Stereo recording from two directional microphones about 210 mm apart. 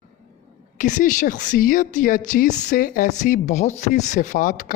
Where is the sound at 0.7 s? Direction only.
35° left (ahead or behind).